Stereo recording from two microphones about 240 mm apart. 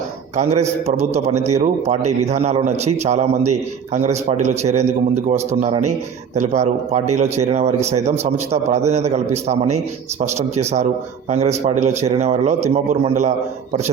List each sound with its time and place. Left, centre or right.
0.3 s a man's voice: right